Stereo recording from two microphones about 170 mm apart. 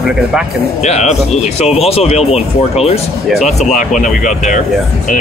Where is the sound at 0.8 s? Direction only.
40° left (ahead or behind).